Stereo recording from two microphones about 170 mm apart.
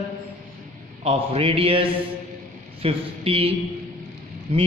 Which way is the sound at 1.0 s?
35° right (ahead or behind).